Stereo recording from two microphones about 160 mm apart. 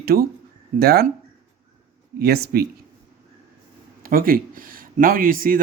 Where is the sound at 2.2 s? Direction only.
75° right (ahead or behind).